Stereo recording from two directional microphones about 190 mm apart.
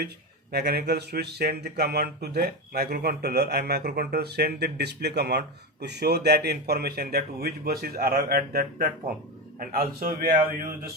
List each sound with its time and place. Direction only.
0.5 s a man's voice: 55° right (ahead or behind)